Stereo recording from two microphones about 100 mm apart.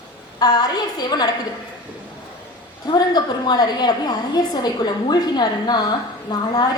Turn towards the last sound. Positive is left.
turn(degrees=45)  # may be behind; listen again after turning